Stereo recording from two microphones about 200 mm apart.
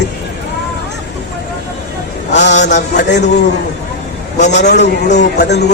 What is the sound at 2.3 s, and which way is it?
Mantra, 60° left (ahead or behind).